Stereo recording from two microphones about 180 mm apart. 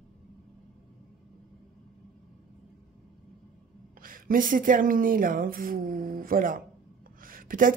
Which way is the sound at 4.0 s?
50° right (ahead or behind).